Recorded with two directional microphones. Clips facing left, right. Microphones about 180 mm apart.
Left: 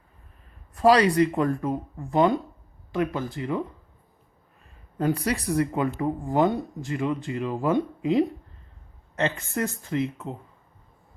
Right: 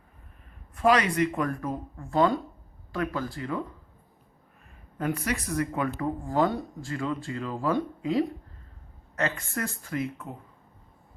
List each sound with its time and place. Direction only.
0.8 s speech: 35° left (ahead or behind)
4.9 s speech: 30° left (ahead or behind)